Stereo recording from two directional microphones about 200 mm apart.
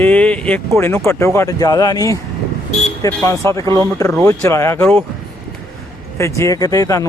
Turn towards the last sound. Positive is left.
turn(degrees=15)  # may be behind; listen again after turning